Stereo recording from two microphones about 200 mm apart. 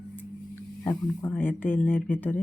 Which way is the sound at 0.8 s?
10° left (ahead or behind).